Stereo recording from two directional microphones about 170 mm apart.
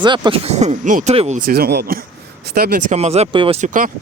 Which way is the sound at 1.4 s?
60° right (ahead or behind).